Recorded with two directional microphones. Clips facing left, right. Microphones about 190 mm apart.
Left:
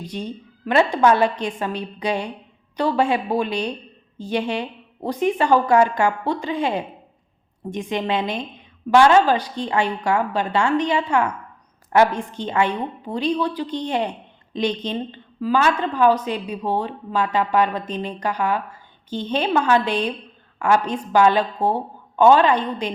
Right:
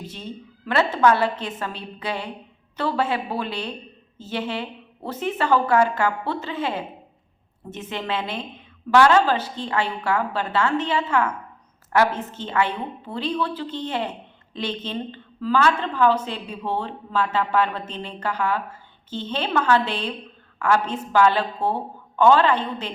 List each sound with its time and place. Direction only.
0.1 s a woman's voice: 15° left (ahead or behind)